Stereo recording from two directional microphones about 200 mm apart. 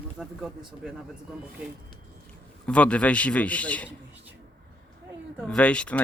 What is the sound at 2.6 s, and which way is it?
Speech, 5° left (ahead or behind).